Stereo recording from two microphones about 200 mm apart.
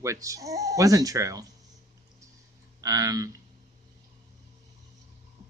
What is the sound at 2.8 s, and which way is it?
Speech, 15° right (ahead or behind).